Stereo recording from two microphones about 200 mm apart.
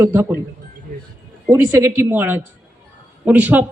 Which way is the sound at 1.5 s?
15° right (ahead or behind).